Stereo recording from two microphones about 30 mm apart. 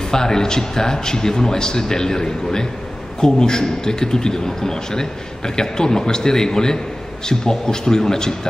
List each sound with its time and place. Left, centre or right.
0.1 s a man's voice: left